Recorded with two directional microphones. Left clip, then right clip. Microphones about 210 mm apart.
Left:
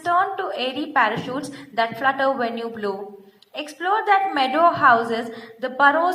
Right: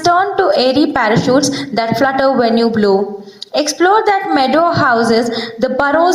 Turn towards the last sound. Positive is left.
turn(degrees=-55)  # may be behind; listen again after turning